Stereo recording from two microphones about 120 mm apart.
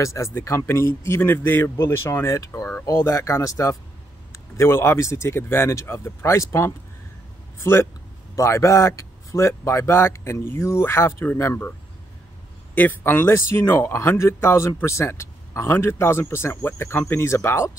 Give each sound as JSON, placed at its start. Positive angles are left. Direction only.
{"t": 0.0, "sound": "speech", "side_deg": 25}
{"t": 12.7, "sound": "speech", "side_deg": 15}